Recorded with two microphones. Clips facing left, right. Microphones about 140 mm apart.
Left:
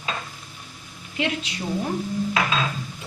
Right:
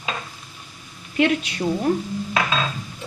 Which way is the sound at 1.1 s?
55° right (ahead or behind).